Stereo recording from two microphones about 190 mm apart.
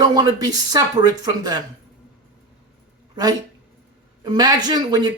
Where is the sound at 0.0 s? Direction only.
20° right (ahead or behind).